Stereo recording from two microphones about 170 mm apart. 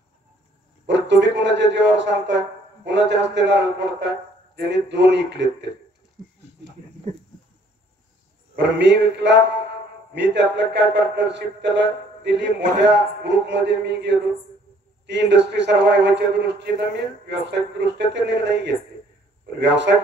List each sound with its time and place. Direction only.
0.8 s a man's voice: 90° right
8.5 s a man's voice: 90° right